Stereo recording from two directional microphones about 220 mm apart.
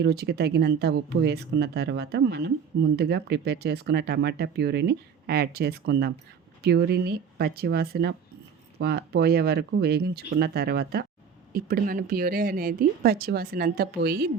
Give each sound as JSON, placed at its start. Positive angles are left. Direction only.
{"t": 0.0, "sound": "speech", "side_deg": -50}